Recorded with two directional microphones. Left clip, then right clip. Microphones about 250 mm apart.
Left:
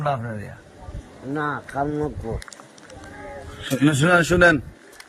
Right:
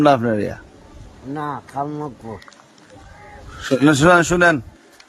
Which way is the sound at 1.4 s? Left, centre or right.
Right.